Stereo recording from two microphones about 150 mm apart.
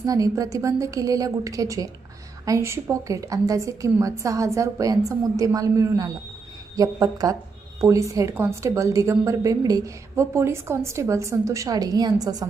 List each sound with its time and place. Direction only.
0.0 s a woman's voice: 25° right (ahead or behind)